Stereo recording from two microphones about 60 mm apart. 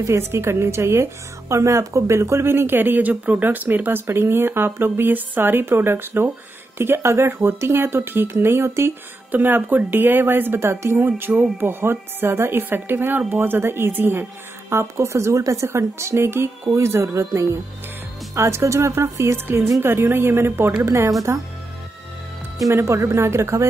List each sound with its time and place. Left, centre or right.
0.0 s speech: right
9.3 s speech: right
14.7 s a woman's voice: right
22.7 s speech: right